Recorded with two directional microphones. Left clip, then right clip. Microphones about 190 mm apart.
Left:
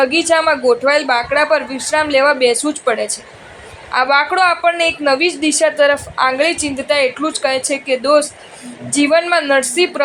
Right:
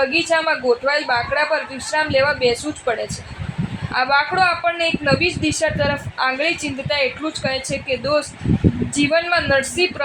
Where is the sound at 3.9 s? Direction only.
30° left (ahead or behind).